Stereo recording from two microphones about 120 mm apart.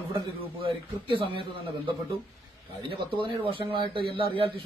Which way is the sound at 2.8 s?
45° right (ahead or behind).